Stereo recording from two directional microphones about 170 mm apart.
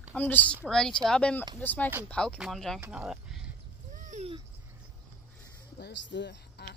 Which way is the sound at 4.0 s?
45° right (ahead or behind).